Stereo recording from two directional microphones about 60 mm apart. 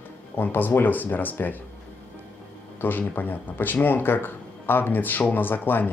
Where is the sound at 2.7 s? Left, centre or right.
Left.